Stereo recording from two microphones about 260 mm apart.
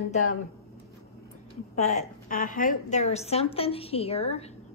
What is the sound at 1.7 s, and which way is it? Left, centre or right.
A woman's voice, left.